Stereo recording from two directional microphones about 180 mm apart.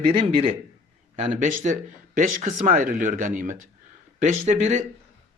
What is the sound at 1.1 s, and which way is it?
Speech, 45° right (ahead or behind).